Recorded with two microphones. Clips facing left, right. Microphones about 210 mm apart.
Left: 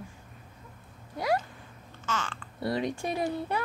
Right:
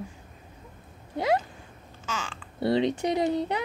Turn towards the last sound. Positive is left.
turn(degrees=-20)  # may be behind; listen again after turning